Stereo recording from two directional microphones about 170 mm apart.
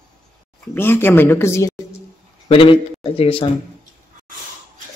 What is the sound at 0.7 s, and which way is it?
Speech, 15° left (ahead or behind).